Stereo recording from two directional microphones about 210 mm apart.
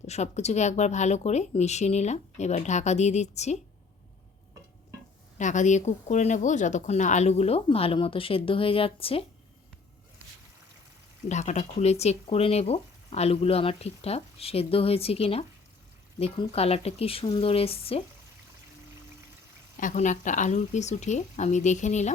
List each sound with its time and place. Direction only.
0.1 s speech: 30° left (ahead or behind)
5.4 s speech: 35° left (ahead or behind)
11.3 s speech: 35° left (ahead or behind)
19.7 s speech: 35° left (ahead or behind)